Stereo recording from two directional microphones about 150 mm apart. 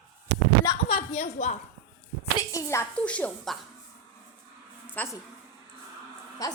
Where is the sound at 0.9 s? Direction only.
40° left (ahead or behind).